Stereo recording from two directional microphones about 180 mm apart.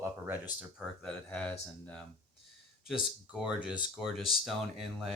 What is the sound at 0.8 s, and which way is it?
Speech, 5° left (ahead or behind).